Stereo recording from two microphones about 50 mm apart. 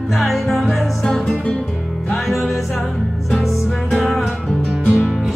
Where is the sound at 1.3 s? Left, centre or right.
Centre.